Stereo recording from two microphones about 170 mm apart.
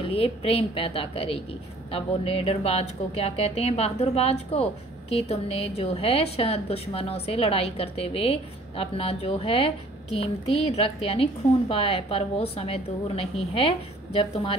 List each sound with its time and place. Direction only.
0.1 s a woman's voice: 35° left (ahead or behind)